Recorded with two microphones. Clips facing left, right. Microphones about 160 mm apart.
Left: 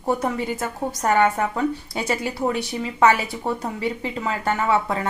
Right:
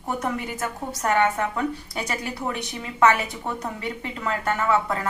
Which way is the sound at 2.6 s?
30° left (ahead or behind).